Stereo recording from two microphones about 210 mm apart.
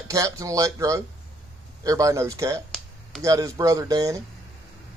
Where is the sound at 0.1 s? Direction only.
15° right (ahead or behind).